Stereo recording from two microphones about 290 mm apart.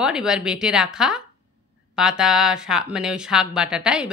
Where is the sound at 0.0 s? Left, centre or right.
Centre.